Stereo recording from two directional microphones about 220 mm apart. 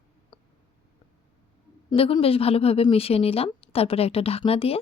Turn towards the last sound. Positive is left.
turn(degrees=25)  # may be behind; listen again after turning